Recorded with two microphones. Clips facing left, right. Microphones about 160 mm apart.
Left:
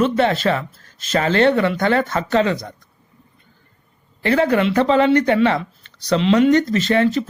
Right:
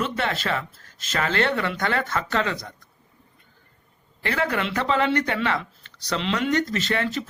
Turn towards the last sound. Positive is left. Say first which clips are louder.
# left 9 dB
turn(degrees=25)  # may be behind; listen again after turning